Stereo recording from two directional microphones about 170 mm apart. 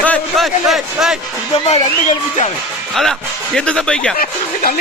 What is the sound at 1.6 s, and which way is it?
Speech, 40° left (ahead or behind).